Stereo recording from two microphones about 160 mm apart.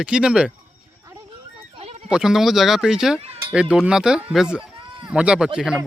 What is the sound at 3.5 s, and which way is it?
Speech, 5° right (ahead or behind).